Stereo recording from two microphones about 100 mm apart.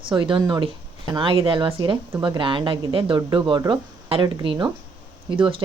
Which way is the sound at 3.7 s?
65° right (ahead or behind).